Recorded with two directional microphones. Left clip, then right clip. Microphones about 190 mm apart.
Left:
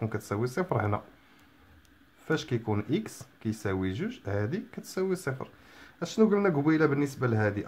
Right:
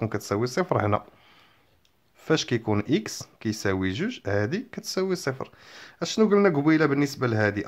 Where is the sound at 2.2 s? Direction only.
25° right (ahead or behind).